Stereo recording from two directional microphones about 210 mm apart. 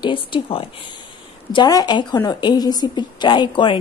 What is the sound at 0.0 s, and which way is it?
A woman's voice, 25° left (ahead or behind).